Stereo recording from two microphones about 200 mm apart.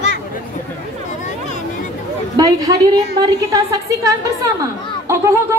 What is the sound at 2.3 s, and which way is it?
A woman's voice, 15° right (ahead or behind).